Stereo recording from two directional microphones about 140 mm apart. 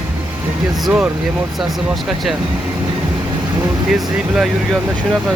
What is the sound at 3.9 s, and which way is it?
Speech, 5° right (ahead or behind).